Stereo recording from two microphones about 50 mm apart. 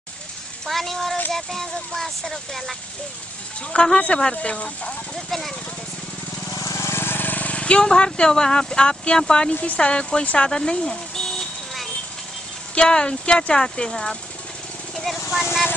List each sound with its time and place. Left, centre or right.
0.7 s speech: centre
3.7 s speech: centre
5.1 s speech: centre
6.7 s vehicle: left
7.0 s vehicle: left
7.8 s speech: centre
10.2 s a sound: centre
12.7 s speech: centre